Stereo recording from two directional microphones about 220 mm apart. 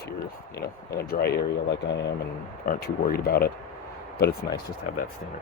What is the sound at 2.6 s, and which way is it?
Speech, 45° left (ahead or behind).